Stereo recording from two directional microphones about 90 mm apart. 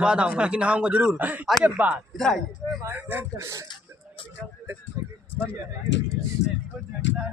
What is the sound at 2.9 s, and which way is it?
Speech, 20° right (ahead or behind).